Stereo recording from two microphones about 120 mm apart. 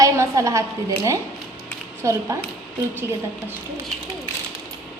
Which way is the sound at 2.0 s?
25° right (ahead or behind).